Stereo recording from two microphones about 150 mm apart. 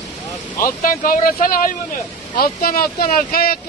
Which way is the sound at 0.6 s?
70° left (ahead or behind).